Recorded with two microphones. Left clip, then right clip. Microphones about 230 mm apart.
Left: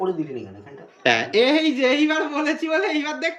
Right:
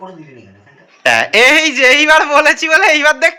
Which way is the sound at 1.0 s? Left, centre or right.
Centre.